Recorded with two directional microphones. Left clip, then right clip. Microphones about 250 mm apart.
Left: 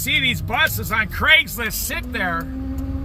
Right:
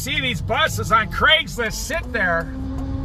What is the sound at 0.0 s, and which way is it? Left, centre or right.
A man's voice, centre.